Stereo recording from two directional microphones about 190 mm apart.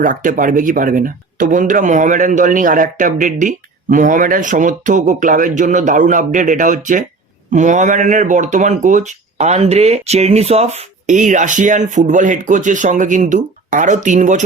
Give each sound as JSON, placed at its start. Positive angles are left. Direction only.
{"t": 0.0, "sound": "speech", "side_deg": -45}